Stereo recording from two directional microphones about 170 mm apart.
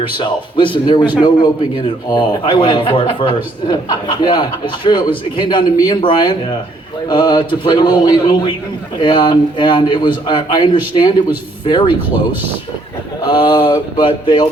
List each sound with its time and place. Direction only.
0.2 s a man's voice: 30° left (ahead or behind)
13.2 s a man's voice: 25° left (ahead or behind)